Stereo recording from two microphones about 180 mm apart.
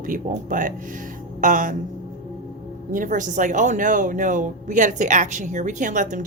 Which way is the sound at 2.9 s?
45° right (ahead or behind).